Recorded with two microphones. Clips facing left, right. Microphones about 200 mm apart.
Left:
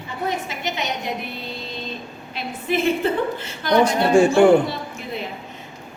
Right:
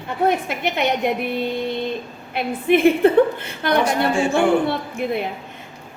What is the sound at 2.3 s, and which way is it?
A woman's voice, 55° right (ahead or behind).